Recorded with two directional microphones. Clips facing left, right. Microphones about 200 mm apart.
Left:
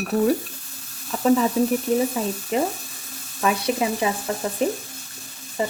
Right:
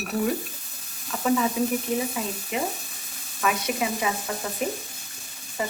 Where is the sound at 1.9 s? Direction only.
40° left (ahead or behind).